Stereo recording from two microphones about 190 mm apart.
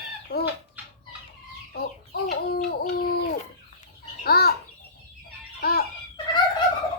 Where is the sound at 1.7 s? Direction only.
55° left (ahead or behind).